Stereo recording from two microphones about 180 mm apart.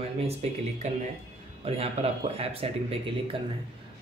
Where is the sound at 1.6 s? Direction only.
35° right (ahead or behind).